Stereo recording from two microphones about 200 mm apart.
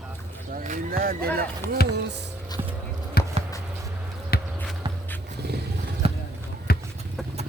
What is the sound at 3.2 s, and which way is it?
Basketball bounce, 50° left (ahead or behind).